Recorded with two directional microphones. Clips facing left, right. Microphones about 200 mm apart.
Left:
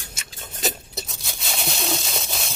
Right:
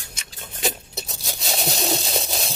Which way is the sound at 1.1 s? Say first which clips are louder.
Right 4 dB; 35° right (ahead or behind).